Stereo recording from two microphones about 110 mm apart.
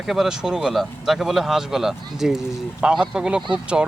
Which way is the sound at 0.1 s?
5° right (ahead or behind).